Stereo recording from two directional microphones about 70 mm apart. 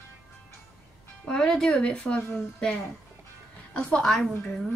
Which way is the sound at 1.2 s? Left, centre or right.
Centre.